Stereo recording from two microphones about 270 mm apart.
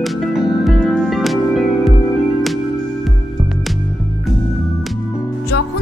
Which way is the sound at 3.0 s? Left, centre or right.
Centre.